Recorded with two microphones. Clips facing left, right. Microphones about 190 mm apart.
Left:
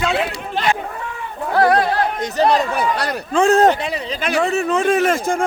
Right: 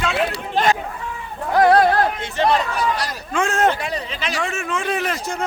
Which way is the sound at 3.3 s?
35° left (ahead or behind).